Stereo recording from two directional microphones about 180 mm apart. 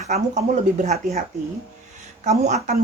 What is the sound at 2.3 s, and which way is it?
Speech, 40° right (ahead or behind).